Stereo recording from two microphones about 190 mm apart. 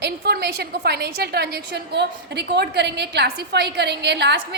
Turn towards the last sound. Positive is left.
turn(degrees=-65)  # may be behind; listen again after turning